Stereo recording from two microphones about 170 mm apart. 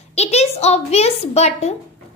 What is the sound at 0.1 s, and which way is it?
A woman's voice, 40° left (ahead or behind).